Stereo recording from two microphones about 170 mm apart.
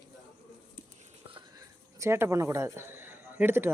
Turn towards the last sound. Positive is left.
turn(degrees=-15)  # may be behind; listen again after turning